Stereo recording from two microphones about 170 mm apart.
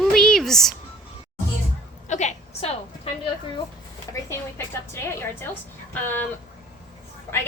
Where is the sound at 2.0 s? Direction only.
45° left (ahead or behind).